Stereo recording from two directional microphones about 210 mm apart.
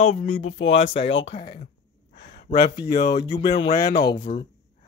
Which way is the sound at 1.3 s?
25° left (ahead or behind).